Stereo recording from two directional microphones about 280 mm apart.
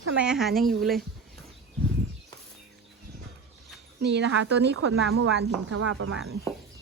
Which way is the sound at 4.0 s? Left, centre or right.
Right.